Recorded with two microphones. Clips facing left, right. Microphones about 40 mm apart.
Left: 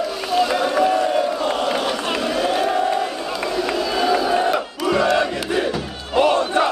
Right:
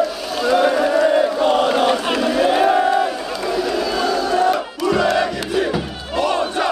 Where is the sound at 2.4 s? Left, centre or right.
Centre.